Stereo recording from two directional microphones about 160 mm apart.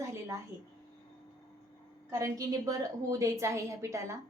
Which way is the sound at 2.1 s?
20° right (ahead or behind).